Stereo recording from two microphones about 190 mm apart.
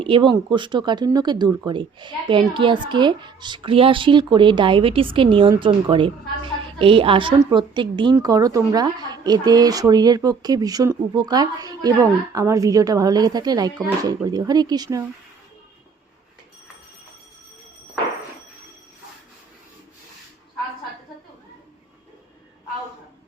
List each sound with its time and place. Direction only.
0.0 s speech: 25° right (ahead or behind)